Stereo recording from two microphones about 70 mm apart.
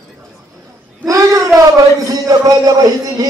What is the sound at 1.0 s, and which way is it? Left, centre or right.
A man's voice, right.